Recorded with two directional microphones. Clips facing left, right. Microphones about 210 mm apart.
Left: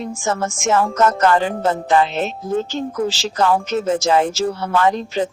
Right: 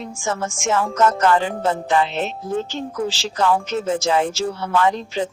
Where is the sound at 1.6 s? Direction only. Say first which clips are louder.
Left 3 dB; 45° left (ahead or behind).